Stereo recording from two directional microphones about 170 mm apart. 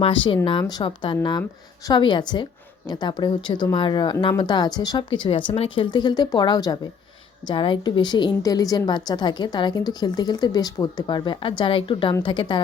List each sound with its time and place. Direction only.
0.0 s a woman's voice: 30° left (ahead or behind)